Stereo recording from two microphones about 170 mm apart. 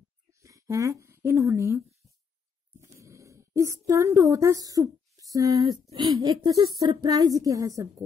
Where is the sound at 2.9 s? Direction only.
20° right (ahead or behind).